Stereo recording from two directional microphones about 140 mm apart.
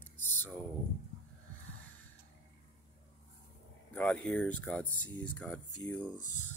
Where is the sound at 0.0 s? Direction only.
15° left (ahead or behind).